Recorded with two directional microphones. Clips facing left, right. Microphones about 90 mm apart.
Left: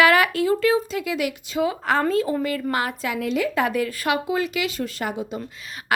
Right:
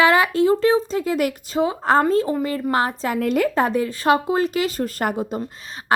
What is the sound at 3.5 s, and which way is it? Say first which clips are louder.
Speech: right 3 dB; 35° right (ahead or behind).